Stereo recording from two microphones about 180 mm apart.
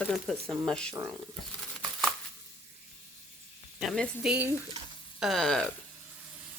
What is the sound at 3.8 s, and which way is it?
Speech, centre (ahead or behind).